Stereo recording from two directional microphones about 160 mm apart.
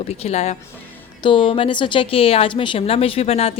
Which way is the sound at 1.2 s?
30° left (ahead or behind).